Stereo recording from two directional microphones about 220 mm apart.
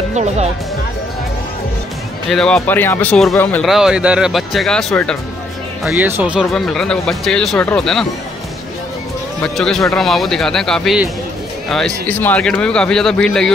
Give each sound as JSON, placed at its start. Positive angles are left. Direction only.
{"t": 0.1, "sound": "speech", "side_deg": -30}
{"t": 2.3, "sound": "speech", "side_deg": 5}
{"t": 5.9, "sound": "speech", "side_deg": -10}
{"t": 9.4, "sound": "speech", "side_deg": 0}